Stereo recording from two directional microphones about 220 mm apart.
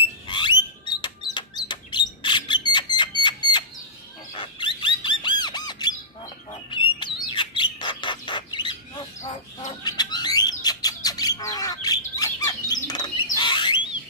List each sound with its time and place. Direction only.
0.3 s rodents: 20° left (ahead or behind)
4.3 s squawk: 20° left (ahead or behind)
6.5 s bird: 20° left (ahead or behind)